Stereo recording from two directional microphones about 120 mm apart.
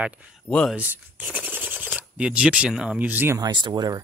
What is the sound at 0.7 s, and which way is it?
Speech, 10° right (ahead or behind).